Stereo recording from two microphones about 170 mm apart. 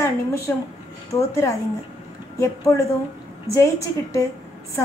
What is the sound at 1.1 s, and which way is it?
Speech, 15° left (ahead or behind).